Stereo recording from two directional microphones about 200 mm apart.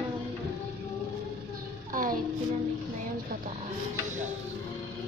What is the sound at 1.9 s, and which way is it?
Music, 45° right (ahead or behind).